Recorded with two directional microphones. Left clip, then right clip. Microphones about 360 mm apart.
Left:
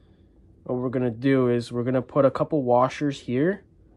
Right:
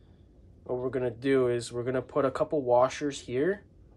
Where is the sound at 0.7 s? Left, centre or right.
Centre.